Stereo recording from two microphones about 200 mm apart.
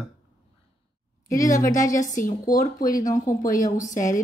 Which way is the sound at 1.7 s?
15° left (ahead or behind).